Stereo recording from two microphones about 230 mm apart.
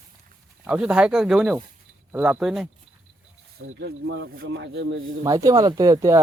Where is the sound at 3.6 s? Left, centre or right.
Right.